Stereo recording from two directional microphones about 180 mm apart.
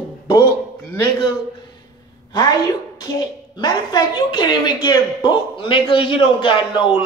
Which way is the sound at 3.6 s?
25° left (ahead or behind).